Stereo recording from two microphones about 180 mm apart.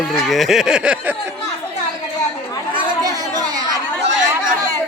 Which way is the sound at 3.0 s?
20° right (ahead or behind).